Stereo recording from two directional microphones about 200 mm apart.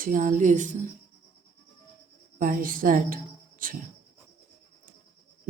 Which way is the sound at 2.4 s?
40° right (ahead or behind).